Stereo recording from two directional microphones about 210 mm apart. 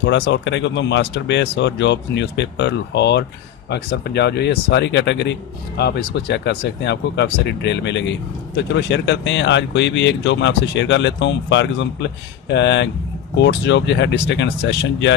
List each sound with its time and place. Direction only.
0.0 s speech: 60° left (ahead or behind)